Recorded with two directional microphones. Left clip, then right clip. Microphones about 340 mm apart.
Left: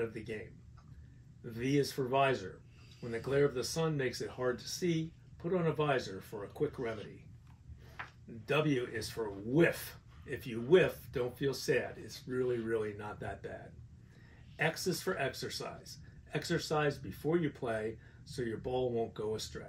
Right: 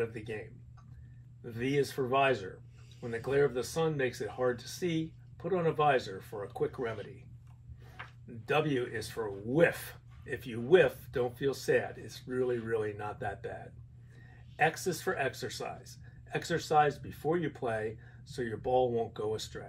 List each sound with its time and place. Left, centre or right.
0.0 s speech: centre
1.4 s speech: centre
8.5 s speech: centre
14.6 s speech: centre